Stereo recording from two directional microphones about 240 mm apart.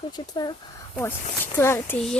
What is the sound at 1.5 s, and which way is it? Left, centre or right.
Speech, centre.